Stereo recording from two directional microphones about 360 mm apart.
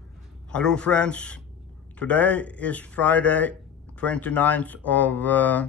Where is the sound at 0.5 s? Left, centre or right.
Centre.